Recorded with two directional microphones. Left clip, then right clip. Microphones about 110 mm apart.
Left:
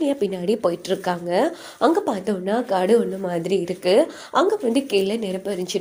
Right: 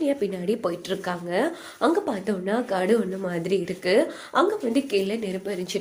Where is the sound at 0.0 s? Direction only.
40° left (ahead or behind).